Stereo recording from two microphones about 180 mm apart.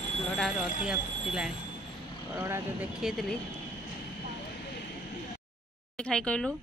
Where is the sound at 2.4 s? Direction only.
15° right (ahead or behind).